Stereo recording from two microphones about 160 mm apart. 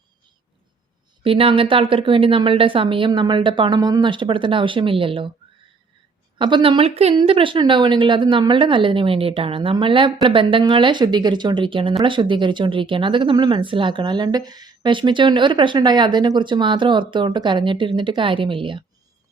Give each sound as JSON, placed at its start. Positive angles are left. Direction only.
{"t": 1.2, "sound": "a woman's voice", "side_deg": -35}
{"t": 6.4, "sound": "a woman's voice", "side_deg": -30}